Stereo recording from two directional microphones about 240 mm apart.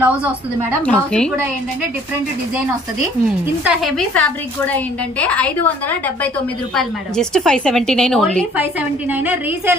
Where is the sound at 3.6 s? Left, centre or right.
Centre.